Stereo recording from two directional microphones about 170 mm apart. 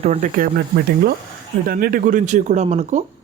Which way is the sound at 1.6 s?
60° right (ahead or behind).